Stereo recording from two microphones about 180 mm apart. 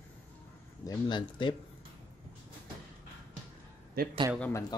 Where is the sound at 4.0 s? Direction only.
55° right (ahead or behind).